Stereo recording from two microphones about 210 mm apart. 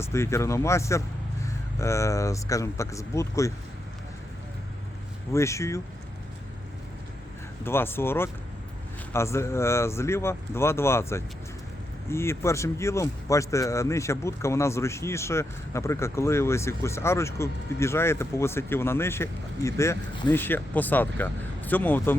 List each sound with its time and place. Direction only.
0.0 s speech: 15° left (ahead or behind)
5.3 s speech: 15° left (ahead or behind)
7.6 s speech: 10° left (ahead or behind)